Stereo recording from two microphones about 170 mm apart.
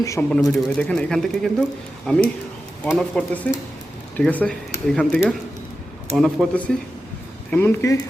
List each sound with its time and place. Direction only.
0.0 s speech: 20° left (ahead or behind)
0.5 s speech: 5° left (ahead or behind)
7.5 s speech: 15° left (ahead or behind)